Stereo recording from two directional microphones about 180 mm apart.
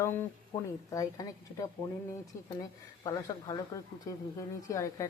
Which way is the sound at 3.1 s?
20° left (ahead or behind).